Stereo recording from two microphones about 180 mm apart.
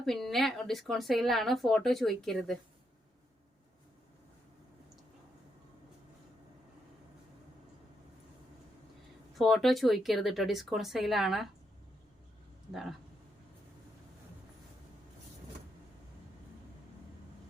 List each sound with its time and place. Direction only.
0.0 s speech: centre (ahead or behind)
9.4 s speech: centre (ahead or behind)
12.7 s speech: centre (ahead or behind)